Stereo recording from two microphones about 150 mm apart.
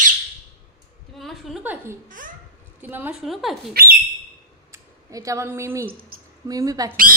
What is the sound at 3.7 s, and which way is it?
Speech, 90° right.